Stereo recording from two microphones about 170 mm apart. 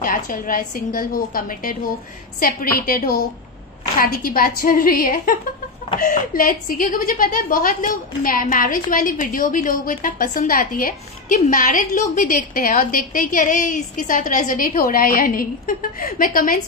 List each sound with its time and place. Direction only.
0.0 s a woman's voice: 55° left (ahead or behind)